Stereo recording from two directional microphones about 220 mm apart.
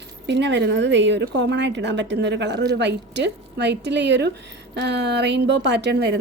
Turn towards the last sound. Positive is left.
turn(degrees=-50)  # may be behind; listen again after turning